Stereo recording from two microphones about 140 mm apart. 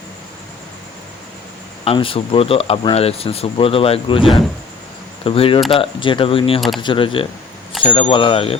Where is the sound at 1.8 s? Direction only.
40° left (ahead or behind).